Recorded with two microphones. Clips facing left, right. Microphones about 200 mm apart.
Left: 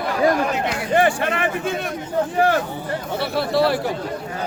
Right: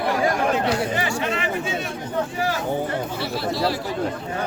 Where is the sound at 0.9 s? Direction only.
55° left (ahead or behind).